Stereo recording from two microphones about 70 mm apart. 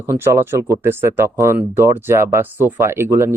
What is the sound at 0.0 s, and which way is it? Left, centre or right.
Speech, right.